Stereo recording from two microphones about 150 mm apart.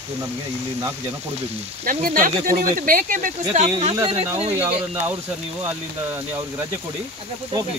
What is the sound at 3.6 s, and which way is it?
Speech, 40° right (ahead or behind).